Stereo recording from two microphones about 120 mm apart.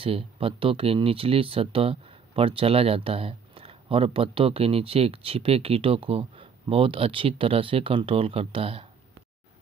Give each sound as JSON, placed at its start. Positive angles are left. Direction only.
{"t": 0.0, "sound": "speech", "side_deg": -50}